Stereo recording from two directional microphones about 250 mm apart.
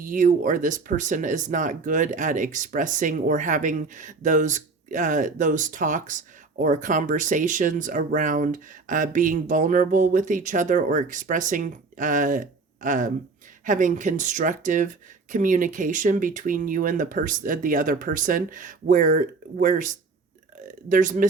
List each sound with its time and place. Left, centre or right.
0.0 s speech: right